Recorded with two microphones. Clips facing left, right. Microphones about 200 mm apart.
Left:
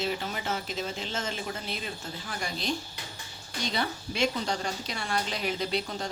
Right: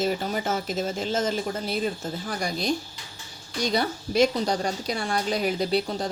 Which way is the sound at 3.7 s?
40° right (ahead or behind).